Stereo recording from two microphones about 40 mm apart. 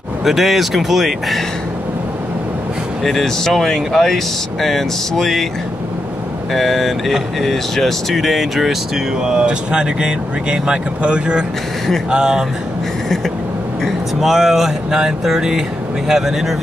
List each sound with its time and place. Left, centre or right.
0.2 s speech: centre
3.0 s speech: centre
6.5 s speech: centre
14.2 s speech: centre